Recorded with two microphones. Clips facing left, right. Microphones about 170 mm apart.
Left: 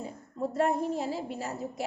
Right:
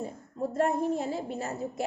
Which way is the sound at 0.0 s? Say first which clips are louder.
Right 1 dB; 50° right (ahead or behind).